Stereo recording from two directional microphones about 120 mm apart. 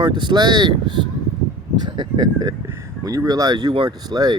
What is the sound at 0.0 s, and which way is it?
Speech, 40° right (ahead or behind).